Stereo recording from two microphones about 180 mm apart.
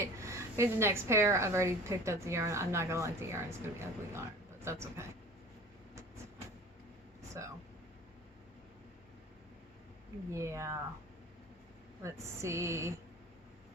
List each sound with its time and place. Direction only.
0.0 s a woman's voice: 15° right (ahead or behind)
7.2 s air conditioning: 15° right (ahead or behind)
10.3 s a woman's voice: 15° right (ahead or behind)
12.0 s a woman's voice: 15° right (ahead or behind)